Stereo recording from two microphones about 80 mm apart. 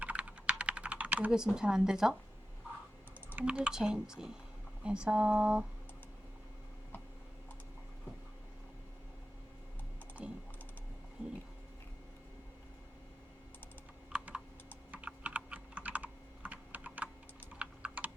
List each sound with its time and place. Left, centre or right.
0.0 s typing: centre
1.5 s speech: centre
3.3 s speech: centre
10.2 s typing: centre
14.1 s computer keyboard: centre
17.5 s typing: centre